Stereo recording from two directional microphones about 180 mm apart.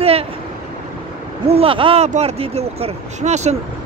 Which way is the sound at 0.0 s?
35° right (ahead or behind).